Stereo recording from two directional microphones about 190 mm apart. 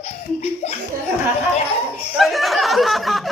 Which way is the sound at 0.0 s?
35° left (ahead or behind).